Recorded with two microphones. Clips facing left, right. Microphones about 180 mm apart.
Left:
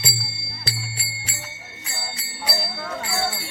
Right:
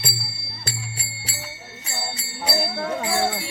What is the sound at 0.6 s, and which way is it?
Music, 45° right (ahead or behind).